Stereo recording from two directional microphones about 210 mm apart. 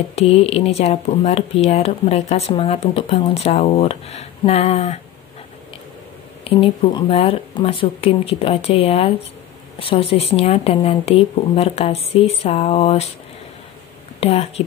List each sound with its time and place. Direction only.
0.1 s speech: 30° left (ahead or behind)
6.4 s speech: 25° left (ahead or behind)
14.2 s speech: 30° left (ahead or behind)